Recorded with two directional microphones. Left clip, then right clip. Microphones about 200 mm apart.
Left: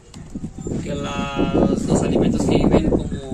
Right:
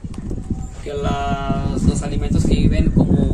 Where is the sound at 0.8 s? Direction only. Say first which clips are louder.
Right 6 dB; 50° left (ahead or behind).